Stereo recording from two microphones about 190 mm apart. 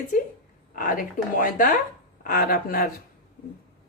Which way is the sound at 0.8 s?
45° left (ahead or behind).